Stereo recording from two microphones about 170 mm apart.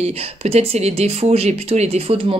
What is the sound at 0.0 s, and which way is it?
Speech, 40° right (ahead or behind).